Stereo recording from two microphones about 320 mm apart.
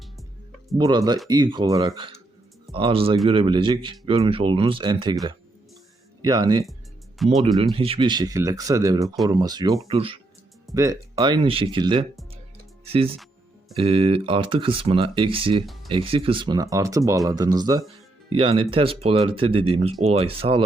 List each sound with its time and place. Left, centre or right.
0.8 s speech: centre
6.2 s speech: centre
12.8 s music: centre
13.7 s speech: centre
15.6 s music: centre
15.9 s speech: centre